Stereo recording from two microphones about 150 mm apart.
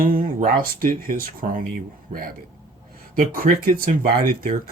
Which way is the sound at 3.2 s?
70° right (ahead or behind).